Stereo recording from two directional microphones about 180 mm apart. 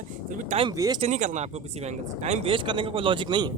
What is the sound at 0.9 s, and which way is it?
Speech, 40° right (ahead or behind).